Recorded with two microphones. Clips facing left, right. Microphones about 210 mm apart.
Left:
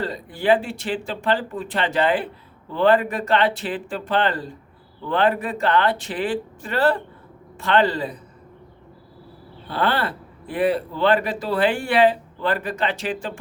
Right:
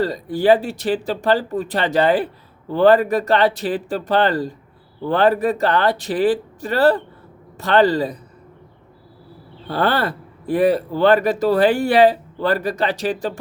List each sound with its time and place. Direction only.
0.0 s speech: 40° right (ahead or behind)
9.6 s speech: 40° right (ahead or behind)